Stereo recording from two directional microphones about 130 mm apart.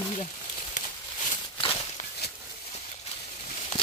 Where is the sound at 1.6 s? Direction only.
45° left (ahead or behind).